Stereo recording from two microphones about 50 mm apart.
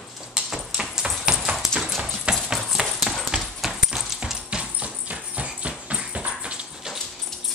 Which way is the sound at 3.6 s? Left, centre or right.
Centre.